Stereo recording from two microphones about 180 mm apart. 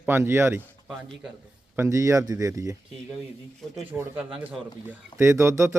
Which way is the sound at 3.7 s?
15° right (ahead or behind).